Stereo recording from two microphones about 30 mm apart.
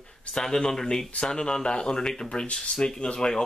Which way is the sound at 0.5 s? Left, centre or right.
Centre.